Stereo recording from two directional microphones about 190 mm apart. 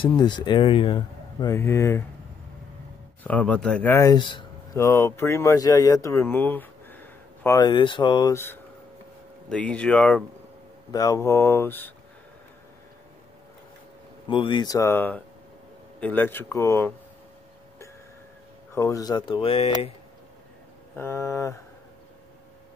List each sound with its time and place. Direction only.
0.0 s speech: 25° left (ahead or behind)
1.5 s speech: 15° left (ahead or behind)
3.3 s speech: 10° left (ahead or behind); by 4.5 s 25° left (ahead or behind)
4.7 s speech: 15° left (ahead or behind)
7.6 s speech: 25° left (ahead or behind); by 10.2 s 5° left (ahead or behind)
10.9 s speech: 20° left (ahead or behind)
14.2 s speech: 25° left (ahead or behind)
18.8 s speech: 20° left (ahead or behind)
20.9 s speech: 15° left (ahead or behind)